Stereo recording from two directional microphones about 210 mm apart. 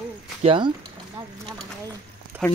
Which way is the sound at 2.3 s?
5° right (ahead or behind).